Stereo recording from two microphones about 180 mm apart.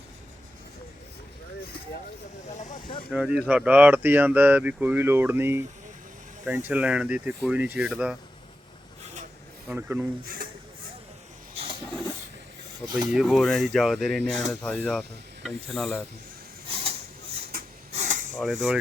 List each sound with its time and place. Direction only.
2.7 s snake: 25° left (ahead or behind)
3.1 s speech: 5° right (ahead or behind)
9.6 s speech: 10° right (ahead or behind)
10.2 s speech: 55° right (ahead or behind)
11.5 s a sound: 30° right (ahead or behind)
12.8 s speech: 25° right (ahead or behind)
13.1 s speech: centre (ahead or behind)
14.3 s speech: 40° right (ahead or behind)
14.5 s speech: centre (ahead or behind)
16.6 s a sound: 30° right (ahead or behind)
17.9 s a sound: 45° right (ahead or behind)
18.3 s speech: 5° right (ahead or behind)